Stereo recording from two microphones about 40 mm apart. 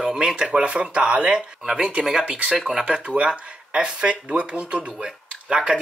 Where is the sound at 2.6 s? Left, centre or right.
Centre.